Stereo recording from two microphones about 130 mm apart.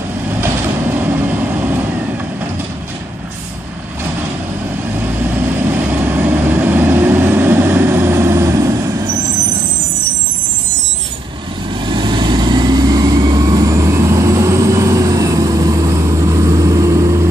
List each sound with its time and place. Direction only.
1.0 s vehicle: 15° right (ahead or behind)
5.7 s vehicle: 15° right (ahead or behind)
11.9 s vehicle: 35° right (ahead or behind)